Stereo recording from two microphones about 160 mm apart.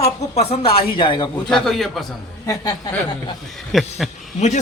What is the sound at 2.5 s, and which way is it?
Speech, 25° left (ahead or behind).